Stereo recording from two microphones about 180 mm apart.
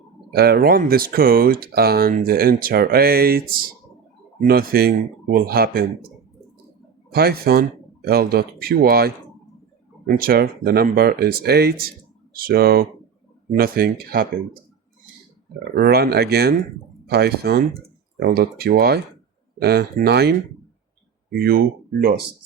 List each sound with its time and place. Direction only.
0.3 s speech: 60° right (ahead or behind)
7.1 s speech: 60° right (ahead or behind)
15.7 s speech: 60° right (ahead or behind)